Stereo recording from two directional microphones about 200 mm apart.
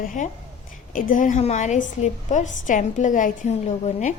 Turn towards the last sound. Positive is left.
turn(degrees=35)  # may be behind; listen again after turning